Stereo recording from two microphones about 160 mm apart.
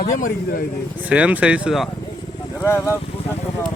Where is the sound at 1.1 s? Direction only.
10° right (ahead or behind).